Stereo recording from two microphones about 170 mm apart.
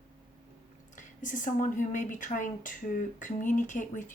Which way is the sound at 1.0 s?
50° left (ahead or behind).